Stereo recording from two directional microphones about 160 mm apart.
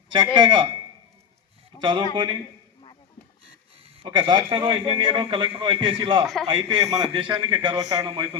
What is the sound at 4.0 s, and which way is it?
A man's voice, 30° right (ahead or behind).